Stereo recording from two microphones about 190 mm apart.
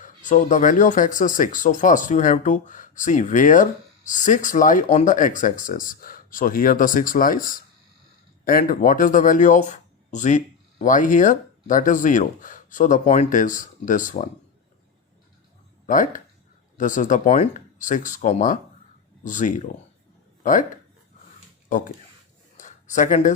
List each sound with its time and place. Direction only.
0.3 s speech: 40° left (ahead or behind)
15.9 s speech: 45° left (ahead or behind)
21.7 s speech: 45° left (ahead or behind)
22.5 s a sound: 40° left (ahead or behind)